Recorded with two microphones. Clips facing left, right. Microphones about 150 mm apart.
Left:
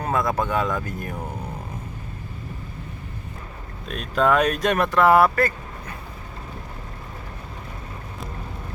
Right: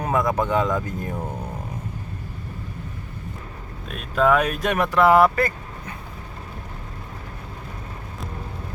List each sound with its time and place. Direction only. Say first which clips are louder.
0.0 s speech: right 1 dB; 15° right (ahead or behind)
3.9 s speech: right 1 dB; 5° right (ahead or behind)